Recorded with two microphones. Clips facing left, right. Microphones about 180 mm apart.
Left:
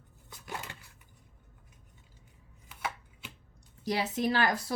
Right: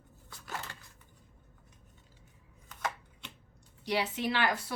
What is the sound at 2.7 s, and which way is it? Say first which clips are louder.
Chopping: right 1 dB; 5° left (ahead or behind).